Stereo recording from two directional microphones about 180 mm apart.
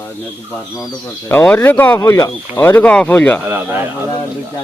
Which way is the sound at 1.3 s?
10° left (ahead or behind).